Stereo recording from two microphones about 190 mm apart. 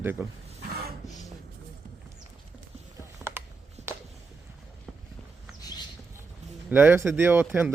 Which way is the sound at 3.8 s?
35° right (ahead or behind).